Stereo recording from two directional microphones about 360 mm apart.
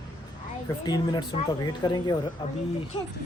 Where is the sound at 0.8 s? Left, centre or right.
Centre.